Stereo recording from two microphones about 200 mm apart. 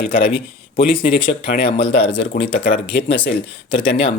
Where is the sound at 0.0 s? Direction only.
65° left (ahead or behind).